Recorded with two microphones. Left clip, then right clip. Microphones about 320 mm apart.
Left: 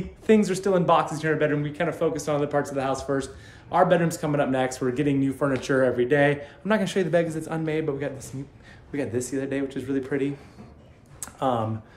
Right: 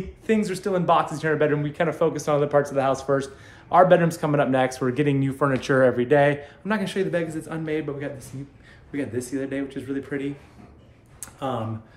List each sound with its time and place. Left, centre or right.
0.3 s speech: centre
6.6 s speech: centre
11.3 s speech: centre